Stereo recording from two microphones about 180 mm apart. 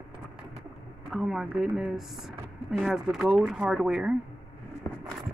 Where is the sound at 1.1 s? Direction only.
5° right (ahead or behind).